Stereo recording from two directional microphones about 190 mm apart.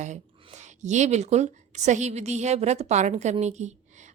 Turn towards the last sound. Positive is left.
turn(degrees=-40)  # may be behind; listen again after turning